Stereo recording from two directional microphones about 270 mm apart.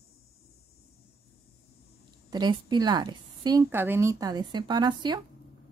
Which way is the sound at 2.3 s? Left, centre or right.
Centre.